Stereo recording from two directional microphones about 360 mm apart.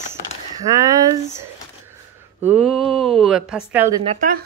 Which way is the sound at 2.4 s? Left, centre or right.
Centre.